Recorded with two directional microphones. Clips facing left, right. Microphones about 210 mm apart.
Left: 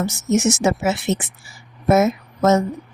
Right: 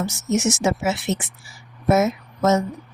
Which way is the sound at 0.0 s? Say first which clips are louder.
Left 3 dB; 50° left (ahead or behind).